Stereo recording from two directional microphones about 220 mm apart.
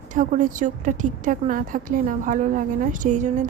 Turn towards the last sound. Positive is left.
turn(degrees=-35)  # may be behind; listen again after turning